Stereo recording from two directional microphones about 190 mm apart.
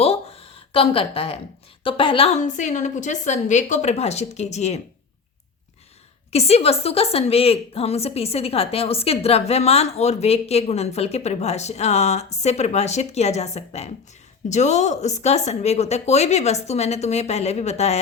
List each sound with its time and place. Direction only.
0.0 s a woman's voice: 30° left (ahead or behind)
6.3 s a woman's voice: 35° left (ahead or behind)